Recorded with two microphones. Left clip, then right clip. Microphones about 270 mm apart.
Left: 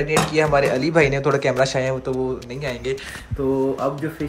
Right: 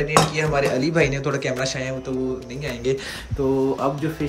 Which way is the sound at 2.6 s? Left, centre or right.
Centre.